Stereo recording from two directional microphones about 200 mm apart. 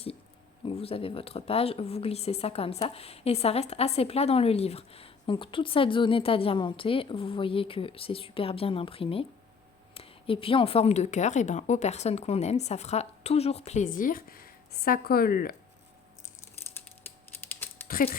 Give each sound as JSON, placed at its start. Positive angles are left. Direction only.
{"t": 0.6, "sound": "a woman's voice", "side_deg": 30}
{"t": 17.5, "sound": "typing", "side_deg": 10}
{"t": 17.8, "sound": "speech", "side_deg": 45}